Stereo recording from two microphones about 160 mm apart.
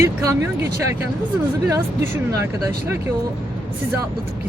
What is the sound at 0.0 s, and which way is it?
Speech, 15° right (ahead or behind).